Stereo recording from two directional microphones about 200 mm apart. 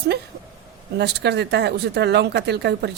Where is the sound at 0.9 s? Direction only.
55° right (ahead or behind).